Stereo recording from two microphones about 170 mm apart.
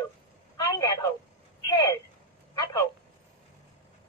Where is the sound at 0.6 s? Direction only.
25° left (ahead or behind).